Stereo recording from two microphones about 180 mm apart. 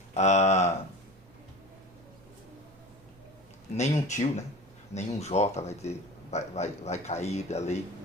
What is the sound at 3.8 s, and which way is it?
A man's voice, 40° left (ahead or behind).